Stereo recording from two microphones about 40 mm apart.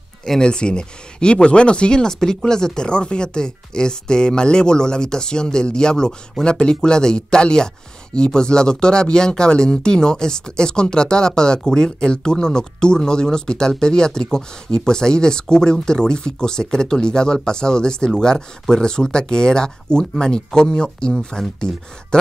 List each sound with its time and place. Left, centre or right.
0.4 s speech: left